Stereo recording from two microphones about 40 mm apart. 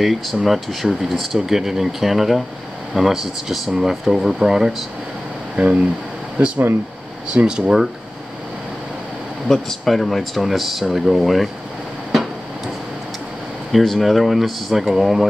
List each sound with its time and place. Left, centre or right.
0.0 s speech: centre
5.6 s speech: right
9.5 s speech: centre
13.7 s speech: centre